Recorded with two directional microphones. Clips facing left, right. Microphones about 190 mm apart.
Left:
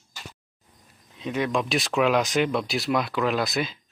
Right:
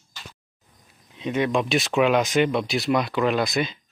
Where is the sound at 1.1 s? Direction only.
Centre (ahead or behind).